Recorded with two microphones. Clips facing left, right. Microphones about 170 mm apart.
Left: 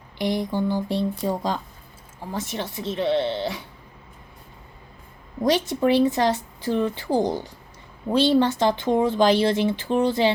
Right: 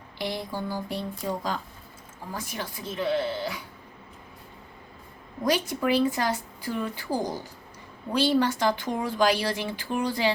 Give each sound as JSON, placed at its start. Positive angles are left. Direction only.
{"t": 0.2, "sound": "speech", "side_deg": 20}
{"t": 5.5, "sound": "speech", "side_deg": 25}